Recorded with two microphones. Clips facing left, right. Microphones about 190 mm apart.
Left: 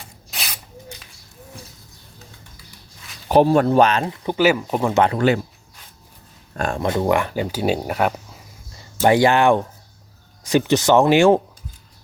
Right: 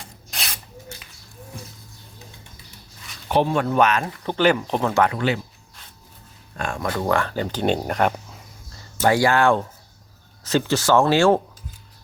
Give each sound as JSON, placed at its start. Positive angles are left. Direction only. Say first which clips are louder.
{"t": 0.3, "sound": "spray", "louder": "left 1 dB", "side_deg": 0}
{"t": 3.2, "sound": "speech", "louder": "left 6 dB", "side_deg": 40}
{"t": 5.1, "sound": "speech", "louder": "left 5 dB", "side_deg": 45}
{"t": 6.6, "sound": "speech", "louder": "left 5 dB", "side_deg": 35}
{"t": 6.8, "sound": "speech", "louder": "left 3 dB", "side_deg": 25}
{"t": 9.0, "sound": "speech", "louder": "left 3 dB", "side_deg": 20}